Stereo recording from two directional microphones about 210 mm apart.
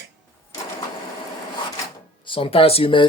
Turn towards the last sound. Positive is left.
turn(degrees=25)  # may be behind; listen again after turning